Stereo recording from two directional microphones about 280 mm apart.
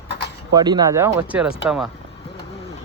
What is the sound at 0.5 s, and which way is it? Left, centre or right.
Speech, centre.